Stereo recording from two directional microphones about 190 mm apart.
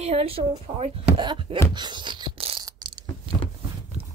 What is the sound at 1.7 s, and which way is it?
Beatboxing, 25° right (ahead or behind).